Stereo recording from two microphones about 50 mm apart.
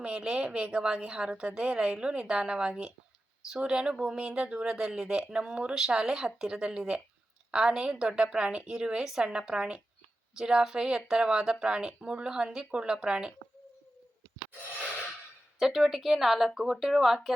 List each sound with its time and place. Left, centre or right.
0.0 s a woman's voice: centre
15.5 s a woman's voice: centre